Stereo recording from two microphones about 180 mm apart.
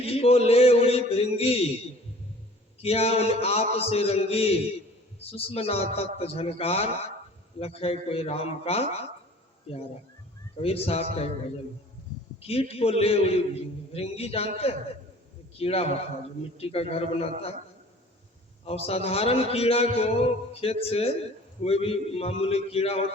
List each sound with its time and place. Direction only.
0.0 s mantra: 35° left (ahead or behind)
2.8 s a man's voice: 35° left (ahead or behind)
12.4 s a man's voice: 35° left (ahead or behind)
18.6 s a man's voice: 35° left (ahead or behind)